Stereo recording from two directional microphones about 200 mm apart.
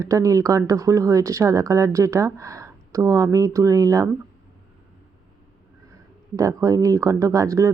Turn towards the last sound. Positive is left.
turn(degrees=-15)  # may be behind; listen again after turning